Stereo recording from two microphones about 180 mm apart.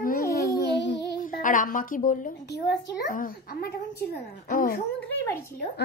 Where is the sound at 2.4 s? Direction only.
65° left (ahead or behind).